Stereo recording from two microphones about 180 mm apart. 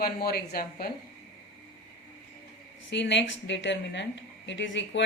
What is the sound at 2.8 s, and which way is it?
A woman's voice, 80° left.